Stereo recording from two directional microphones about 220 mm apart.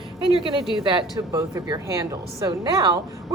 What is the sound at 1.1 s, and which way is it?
A woman's voice, 15° right (ahead or behind).